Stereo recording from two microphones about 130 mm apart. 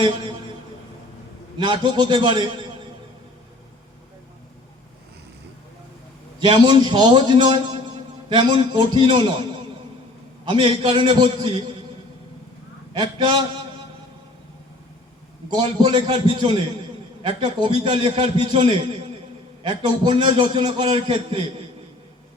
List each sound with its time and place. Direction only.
1.5 s a man's voice: 35° right (ahead or behind)
6.4 s a man's voice: 35° right (ahead or behind)
10.4 s a man's voice: 40° right (ahead or behind)
12.9 s a man's voice: 35° right (ahead or behind)
15.4 s a man's voice: 35° right (ahead or behind)